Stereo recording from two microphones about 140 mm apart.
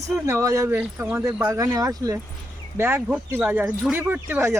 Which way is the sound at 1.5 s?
25° right (ahead or behind).